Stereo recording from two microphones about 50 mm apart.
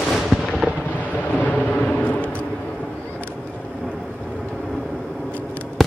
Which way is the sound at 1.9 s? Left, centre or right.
Left.